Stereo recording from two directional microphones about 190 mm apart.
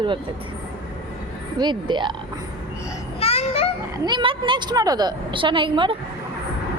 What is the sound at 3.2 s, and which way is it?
Child singing, 30° left (ahead or behind).